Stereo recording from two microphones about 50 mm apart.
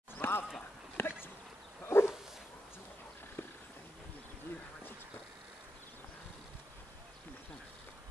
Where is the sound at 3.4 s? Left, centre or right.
Left.